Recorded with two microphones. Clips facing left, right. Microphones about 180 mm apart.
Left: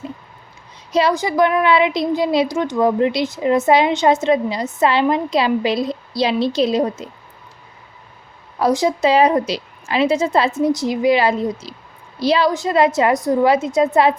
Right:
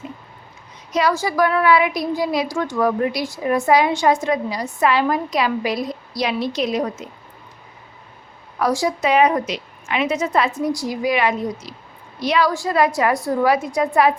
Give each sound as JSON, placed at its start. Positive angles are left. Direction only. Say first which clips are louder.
{"t": 0.9, "sound": "speech", "louder": "left 3 dB", "side_deg": 20}
{"t": 8.5, "sound": "speech", "louder": "left 3 dB", "side_deg": 25}